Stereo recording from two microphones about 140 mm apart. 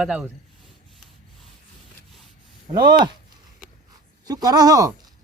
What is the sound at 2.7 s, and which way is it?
Speech, 30° right (ahead or behind).